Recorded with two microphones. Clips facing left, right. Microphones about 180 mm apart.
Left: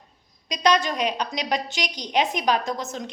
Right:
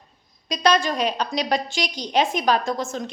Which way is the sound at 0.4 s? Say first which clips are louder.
Right 1 dB; 15° left (ahead or behind).